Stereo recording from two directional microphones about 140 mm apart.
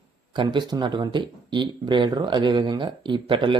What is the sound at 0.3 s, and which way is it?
Speech, 30° right (ahead or behind).